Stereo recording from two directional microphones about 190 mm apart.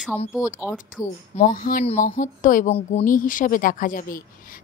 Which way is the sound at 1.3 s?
45° left (ahead or behind).